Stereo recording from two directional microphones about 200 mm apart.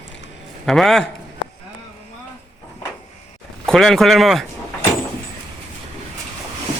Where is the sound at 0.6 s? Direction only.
Centre (ahead or behind).